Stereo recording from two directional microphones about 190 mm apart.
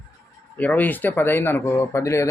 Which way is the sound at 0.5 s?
10° left (ahead or behind).